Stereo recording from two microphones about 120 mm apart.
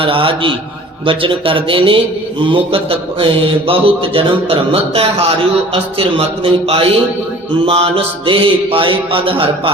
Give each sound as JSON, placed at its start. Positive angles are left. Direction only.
{"t": 0.0, "sound": "speech", "side_deg": -45}